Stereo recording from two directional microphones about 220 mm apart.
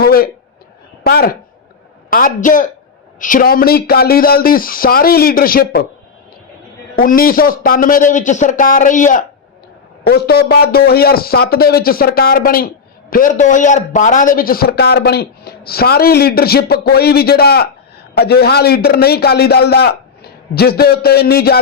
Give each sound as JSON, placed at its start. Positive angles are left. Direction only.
{"t": 0.0, "sound": "a sound", "side_deg": 40}
{"t": 1.0, "sound": "a man's voice", "side_deg": 45}
{"t": 6.9, "sound": "speech", "side_deg": 40}
{"t": 10.1, "sound": "a man's voice", "side_deg": 45}